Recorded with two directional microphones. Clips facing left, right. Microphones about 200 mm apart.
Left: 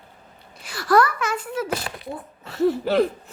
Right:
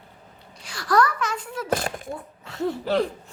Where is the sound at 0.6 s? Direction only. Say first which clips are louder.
Left 3 dB; 5° left (ahead or behind).